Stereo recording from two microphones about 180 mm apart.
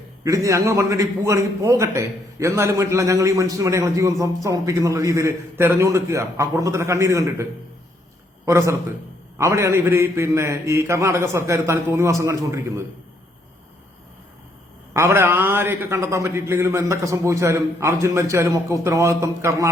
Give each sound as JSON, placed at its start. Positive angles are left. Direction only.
{"t": 0.3, "sound": "a man's voice", "side_deg": -15}
{"t": 8.4, "sound": "a man's voice", "side_deg": -15}
{"t": 14.9, "sound": "a man's voice", "side_deg": -15}